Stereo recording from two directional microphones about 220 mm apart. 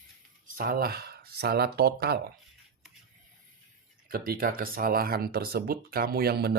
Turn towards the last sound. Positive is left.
turn(degrees=-45)  # may be behind; listen again after turning